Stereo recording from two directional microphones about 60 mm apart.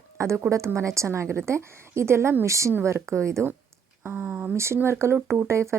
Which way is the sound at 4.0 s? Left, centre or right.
Right.